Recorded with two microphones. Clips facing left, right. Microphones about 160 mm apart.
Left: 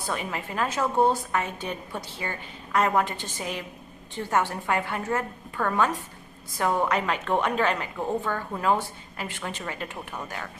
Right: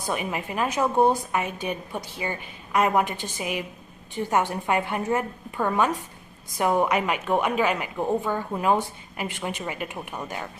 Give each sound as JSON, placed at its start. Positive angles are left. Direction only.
{"t": 0.0, "sound": "a woman's voice", "side_deg": -15}